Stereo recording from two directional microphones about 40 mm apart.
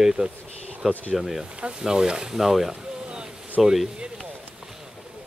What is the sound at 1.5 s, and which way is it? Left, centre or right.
Speech, right.